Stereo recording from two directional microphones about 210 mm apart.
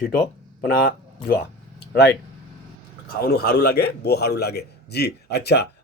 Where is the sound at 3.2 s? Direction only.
45° left (ahead or behind).